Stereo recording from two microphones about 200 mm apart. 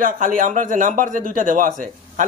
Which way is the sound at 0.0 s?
40° right (ahead or behind).